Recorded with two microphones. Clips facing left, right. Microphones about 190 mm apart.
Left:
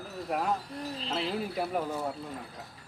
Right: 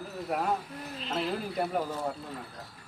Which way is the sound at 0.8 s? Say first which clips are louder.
Left 2 dB; 30° left (ahead or behind).